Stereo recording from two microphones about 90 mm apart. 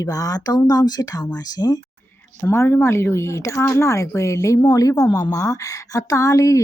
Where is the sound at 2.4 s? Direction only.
30° left (ahead or behind).